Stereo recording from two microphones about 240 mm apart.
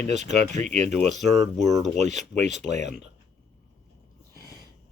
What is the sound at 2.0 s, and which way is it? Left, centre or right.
Speech, right.